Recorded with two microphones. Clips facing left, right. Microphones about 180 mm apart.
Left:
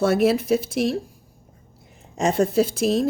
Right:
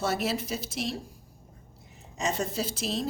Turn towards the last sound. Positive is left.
turn(degrees=55)  # may be behind; listen again after turning